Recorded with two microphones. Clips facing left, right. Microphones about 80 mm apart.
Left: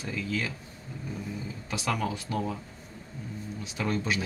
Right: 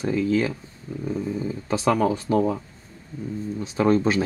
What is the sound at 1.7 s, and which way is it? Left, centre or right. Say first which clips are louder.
Speech: right 10 dB; right.